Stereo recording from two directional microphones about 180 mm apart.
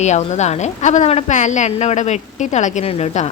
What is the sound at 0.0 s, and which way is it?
A woman's voice, 40° left (ahead or behind).